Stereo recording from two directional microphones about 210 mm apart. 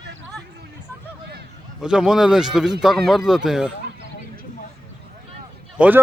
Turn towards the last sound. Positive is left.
turn(degrees=-5)  # may be behind; listen again after turning